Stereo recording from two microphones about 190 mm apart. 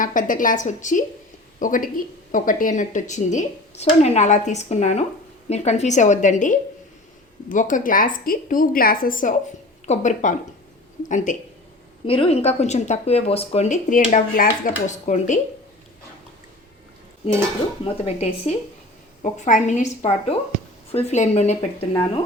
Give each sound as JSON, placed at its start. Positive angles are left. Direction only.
{"t": 0.0, "sound": "a woman's voice", "side_deg": 45}
{"t": 12.0, "sound": "speech", "side_deg": 30}
{"t": 17.8, "sound": "speech", "side_deg": 35}